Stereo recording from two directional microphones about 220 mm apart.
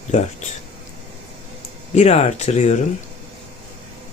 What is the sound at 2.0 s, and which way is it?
Speech, 30° left (ahead or behind).